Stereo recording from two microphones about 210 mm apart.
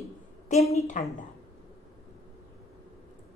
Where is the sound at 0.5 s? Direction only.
30° left (ahead or behind).